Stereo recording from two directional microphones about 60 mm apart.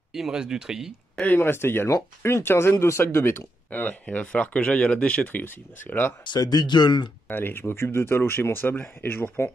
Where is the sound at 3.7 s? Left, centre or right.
Left.